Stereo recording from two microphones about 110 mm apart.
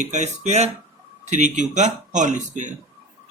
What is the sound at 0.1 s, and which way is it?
Speech, 90° right.